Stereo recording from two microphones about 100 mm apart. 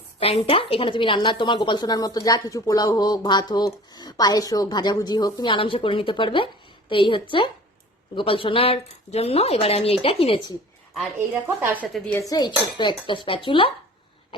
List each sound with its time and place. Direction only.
0.2 s speech: 80° left; by 5.5 s 40° left (ahead or behind)
5.5 s a woman's voice: 60° left (ahead or behind)
11.4 s a woman's voice: 20° right (ahead or behind)
12.3 s a woman's voice: 45° left (ahead or behind)